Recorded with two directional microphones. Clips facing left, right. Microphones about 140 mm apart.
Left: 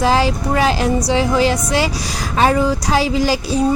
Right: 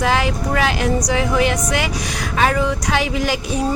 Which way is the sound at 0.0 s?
30° left (ahead or behind).